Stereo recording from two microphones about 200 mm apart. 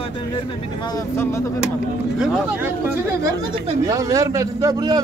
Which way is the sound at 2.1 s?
5° right (ahead or behind).